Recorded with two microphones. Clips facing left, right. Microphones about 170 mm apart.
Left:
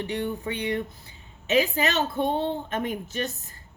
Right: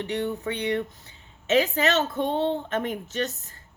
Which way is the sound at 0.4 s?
10° left (ahead or behind).